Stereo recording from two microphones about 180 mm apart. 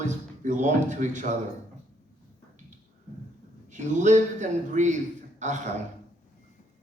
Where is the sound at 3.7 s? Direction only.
40° right (ahead or behind).